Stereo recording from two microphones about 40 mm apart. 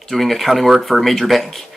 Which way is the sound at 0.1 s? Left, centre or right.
Centre.